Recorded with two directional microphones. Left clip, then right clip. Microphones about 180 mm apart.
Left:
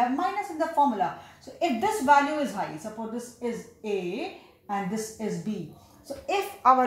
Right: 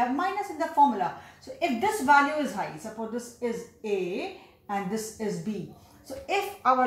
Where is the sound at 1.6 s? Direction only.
30° left (ahead or behind).